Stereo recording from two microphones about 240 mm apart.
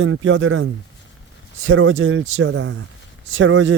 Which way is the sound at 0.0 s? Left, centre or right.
Right.